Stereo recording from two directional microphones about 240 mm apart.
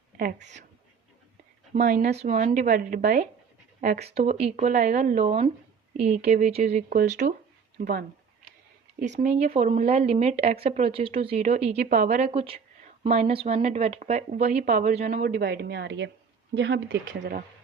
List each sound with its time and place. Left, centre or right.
0.2 s a woman's voice: right
1.7 s a woman's voice: right
17.1 s speech: right